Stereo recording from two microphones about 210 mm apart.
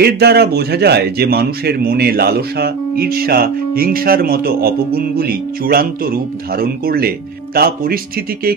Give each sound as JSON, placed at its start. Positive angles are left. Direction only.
{"t": 0.0, "sound": "speech", "side_deg": -50}